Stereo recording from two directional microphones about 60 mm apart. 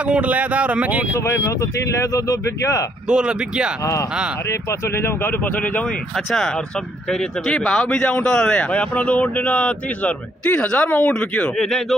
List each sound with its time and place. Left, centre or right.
0.0 s speech: right
1.1 s speech: left
3.1 s speech: centre
3.8 s speech: left
4.5 s speech: left
5.9 s speech: centre
11.5 s speech: centre